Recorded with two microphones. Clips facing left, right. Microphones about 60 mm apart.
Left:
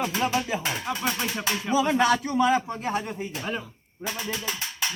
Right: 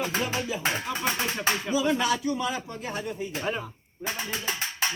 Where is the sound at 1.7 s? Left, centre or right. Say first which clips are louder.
Left 5 dB; left.